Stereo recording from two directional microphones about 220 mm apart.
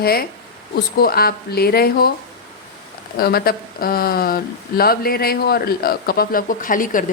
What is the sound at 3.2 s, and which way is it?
Speech, 45° left (ahead or behind).